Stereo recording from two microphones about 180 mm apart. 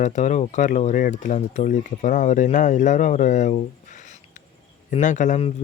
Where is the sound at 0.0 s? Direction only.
40° left (ahead or behind).